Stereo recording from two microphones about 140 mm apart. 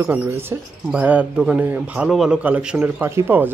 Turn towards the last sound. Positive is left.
turn(degrees=-15)  # may be behind; listen again after turning